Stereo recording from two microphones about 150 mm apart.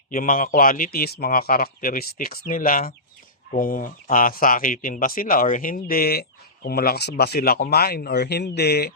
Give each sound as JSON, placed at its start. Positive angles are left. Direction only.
{"t": 0.1, "sound": "a man's voice", "side_deg": 65}